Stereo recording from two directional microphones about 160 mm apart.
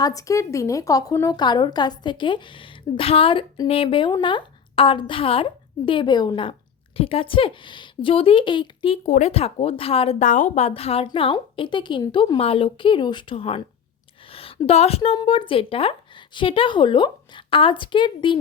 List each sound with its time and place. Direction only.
0.0 s a woman's voice: 20° left (ahead or behind)
9.0 s a woman's voice: 45° left (ahead or behind); by 18.3 s 30° left (ahead or behind)